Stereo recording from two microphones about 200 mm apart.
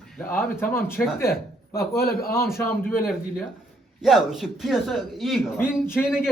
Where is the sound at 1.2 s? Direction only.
50° left (ahead or behind).